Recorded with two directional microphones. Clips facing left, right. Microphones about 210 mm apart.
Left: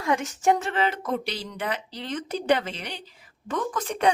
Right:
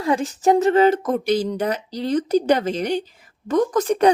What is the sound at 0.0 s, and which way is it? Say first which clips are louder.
A woman's voice: right 5 dB; 35° right (ahead or behind).